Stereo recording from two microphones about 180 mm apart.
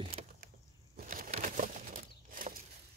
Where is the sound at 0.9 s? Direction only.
50° right (ahead or behind).